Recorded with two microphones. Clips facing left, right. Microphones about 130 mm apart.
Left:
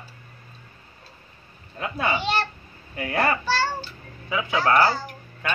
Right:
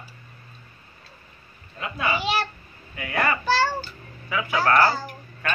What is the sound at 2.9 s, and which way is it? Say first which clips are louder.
Speech: left 2 dB; 35° left (ahead or behind).